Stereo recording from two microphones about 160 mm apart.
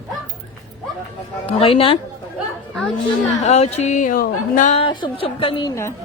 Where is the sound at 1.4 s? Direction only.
35° left (ahead or behind).